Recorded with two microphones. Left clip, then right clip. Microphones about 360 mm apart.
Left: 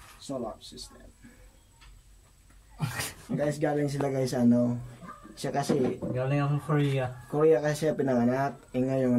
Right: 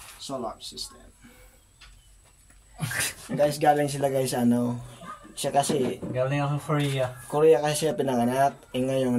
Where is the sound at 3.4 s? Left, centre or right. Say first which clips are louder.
Right 7 dB; right.